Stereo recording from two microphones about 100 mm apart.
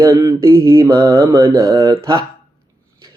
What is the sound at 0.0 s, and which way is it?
Mantra, 30° right (ahead or behind).